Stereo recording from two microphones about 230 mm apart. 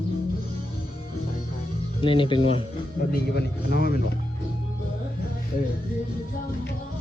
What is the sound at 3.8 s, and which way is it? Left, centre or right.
Speech, left.